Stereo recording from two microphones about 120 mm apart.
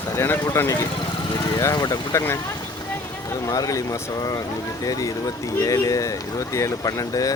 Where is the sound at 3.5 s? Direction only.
30° left (ahead or behind).